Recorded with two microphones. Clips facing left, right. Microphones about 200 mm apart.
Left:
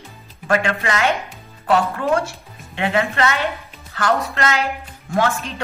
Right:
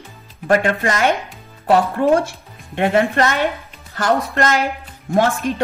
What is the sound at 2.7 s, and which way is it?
Speech, 50° right (ahead or behind).